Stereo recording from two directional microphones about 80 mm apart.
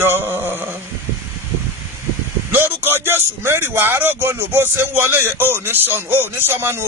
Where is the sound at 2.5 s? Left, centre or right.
Right.